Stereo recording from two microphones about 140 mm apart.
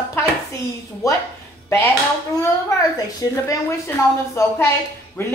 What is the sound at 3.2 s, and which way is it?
A woman's voice, 25° left (ahead or behind).